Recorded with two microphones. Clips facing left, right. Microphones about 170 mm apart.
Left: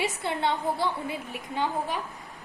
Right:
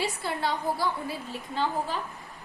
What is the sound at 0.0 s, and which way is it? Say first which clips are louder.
A woman's voice: left 2 dB; 20° left (ahead or behind).